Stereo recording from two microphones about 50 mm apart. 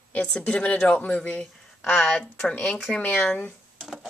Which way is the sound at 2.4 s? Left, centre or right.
Left.